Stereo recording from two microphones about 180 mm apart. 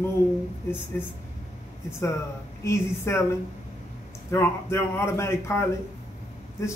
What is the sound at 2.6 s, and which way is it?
Speech, 15° left (ahead or behind).